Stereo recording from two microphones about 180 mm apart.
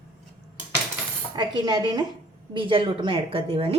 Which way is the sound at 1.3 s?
25° right (ahead or behind).